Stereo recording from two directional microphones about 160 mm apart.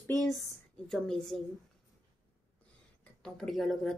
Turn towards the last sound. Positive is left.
turn(degrees=0)  # may be behind; listen again after turning